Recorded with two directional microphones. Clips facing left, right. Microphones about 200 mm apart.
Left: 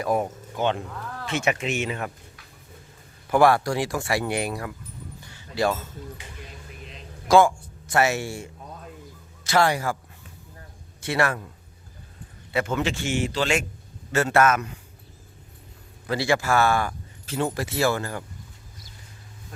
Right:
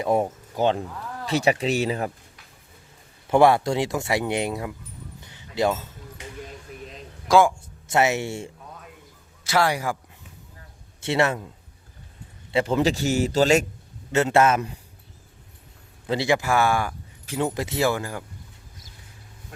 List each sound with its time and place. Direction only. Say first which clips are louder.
0.0 s a man's voice: right 2 dB; 25° right (ahead or behind)
3.2 s speech: right 2 dB; 25° right (ahead or behind)
5.2 s a sound: right 1 dB; 20° right (ahead or behind)
7.4 s speech: even; 20° right (ahead or behind)
9.4 s speech: left 1 dB; 10° right (ahead or behind)
11.0 s a man's voice: right 2 dB; 25° right (ahead or behind)
12.5 s a man's voice: right 4 dB; 30° right (ahead or behind)
14.1 s speech: right 1 dB; 20° right (ahead or behind)
16.0 s speech: right 1 dB; 20° right (ahead or behind)